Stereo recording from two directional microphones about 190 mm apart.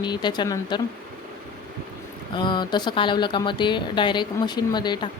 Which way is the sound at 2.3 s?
25° left (ahead or behind).